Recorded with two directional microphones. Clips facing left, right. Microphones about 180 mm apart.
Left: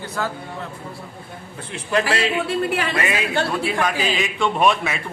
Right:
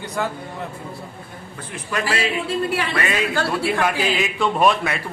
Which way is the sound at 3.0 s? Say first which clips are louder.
Even; 20° left (ahead or behind).